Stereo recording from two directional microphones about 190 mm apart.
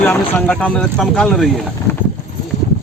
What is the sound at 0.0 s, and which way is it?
Speech, 10° left (ahead or behind).